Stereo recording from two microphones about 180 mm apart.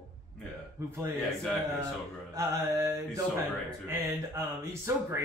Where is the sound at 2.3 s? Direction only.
20° right (ahead or behind).